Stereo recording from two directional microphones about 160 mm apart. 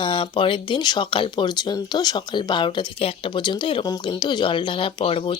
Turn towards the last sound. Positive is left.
turn(degrees=35)  # may be behind; listen again after turning